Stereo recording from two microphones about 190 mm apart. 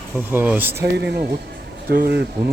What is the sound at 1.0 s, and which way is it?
Speech, 60° right (ahead or behind).